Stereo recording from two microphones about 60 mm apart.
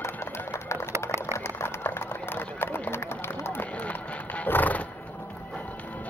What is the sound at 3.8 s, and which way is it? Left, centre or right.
Horse, left.